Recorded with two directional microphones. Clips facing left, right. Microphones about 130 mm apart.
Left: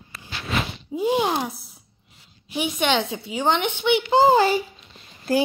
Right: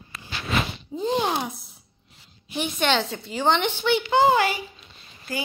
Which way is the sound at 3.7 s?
55° left (ahead or behind).